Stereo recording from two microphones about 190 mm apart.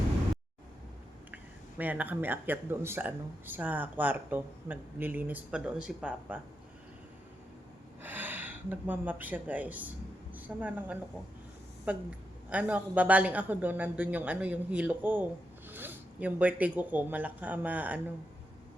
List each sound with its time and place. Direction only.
1.8 s speech: 10° right (ahead or behind)
8.0 s a woman's voice: 10° right (ahead or behind)